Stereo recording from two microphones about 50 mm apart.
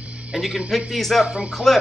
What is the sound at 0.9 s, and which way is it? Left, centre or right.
Speech, centre.